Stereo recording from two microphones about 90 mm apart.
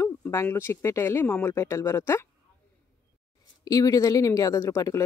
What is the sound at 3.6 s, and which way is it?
Speech, 45° left (ahead or behind).